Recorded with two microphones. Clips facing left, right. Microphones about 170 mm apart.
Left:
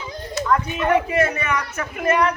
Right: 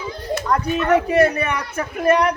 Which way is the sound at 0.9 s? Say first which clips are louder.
Right 3 dB; 40° right (ahead or behind).